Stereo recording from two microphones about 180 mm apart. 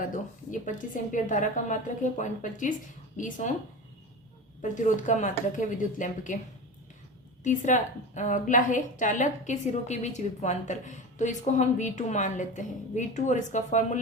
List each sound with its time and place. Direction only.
0.0 s a woman's voice: 45° left (ahead or behind)
4.6 s a woman's voice: 45° left (ahead or behind)
7.4 s a woman's voice: 45° left (ahead or behind)